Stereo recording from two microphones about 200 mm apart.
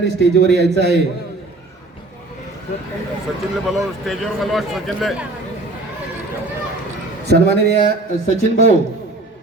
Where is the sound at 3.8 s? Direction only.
Centre (ahead or behind).